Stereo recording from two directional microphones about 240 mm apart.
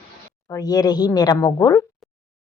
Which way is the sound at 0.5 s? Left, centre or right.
Centre.